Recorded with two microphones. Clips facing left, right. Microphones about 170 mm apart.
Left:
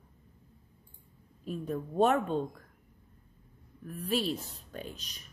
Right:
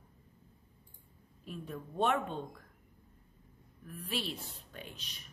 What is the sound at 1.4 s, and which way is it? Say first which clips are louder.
Speech: left 8 dB; 40° left (ahead or behind).